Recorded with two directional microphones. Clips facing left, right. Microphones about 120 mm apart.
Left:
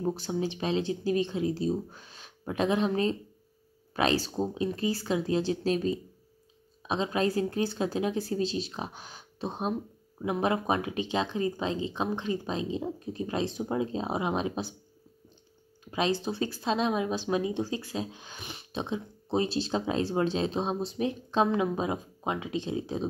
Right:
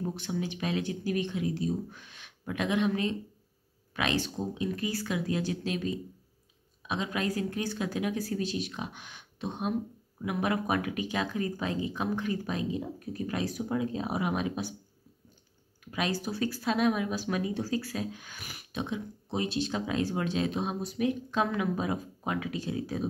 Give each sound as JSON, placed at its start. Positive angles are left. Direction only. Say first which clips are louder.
{"t": 0.0, "sound": "speech", "louder": "left 4 dB", "side_deg": 30}
{"t": 15.8, "sound": "speech", "louder": "left 4 dB", "side_deg": 25}